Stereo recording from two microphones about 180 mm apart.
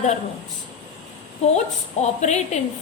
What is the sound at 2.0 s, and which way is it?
Speech, 40° left (ahead or behind).